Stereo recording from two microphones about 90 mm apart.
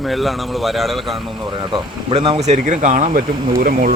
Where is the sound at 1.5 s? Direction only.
60° right (ahead or behind); by 2.3 s 90° right.